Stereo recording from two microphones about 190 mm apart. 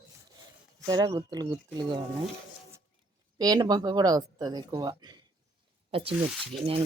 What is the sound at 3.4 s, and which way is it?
Speech, 20° right (ahead or behind).